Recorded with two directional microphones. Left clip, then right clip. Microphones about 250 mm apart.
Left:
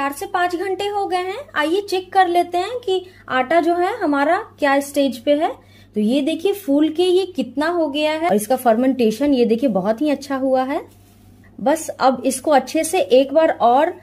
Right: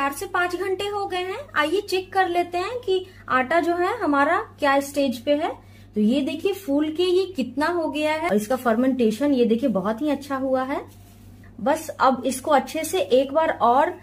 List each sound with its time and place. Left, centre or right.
0.0 s speech: centre